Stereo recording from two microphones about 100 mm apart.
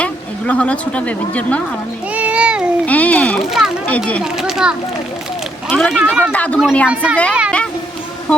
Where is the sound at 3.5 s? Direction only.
5° right (ahead or behind).